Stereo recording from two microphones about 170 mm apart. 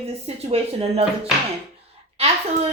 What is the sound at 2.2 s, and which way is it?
Speech, 35° right (ahead or behind).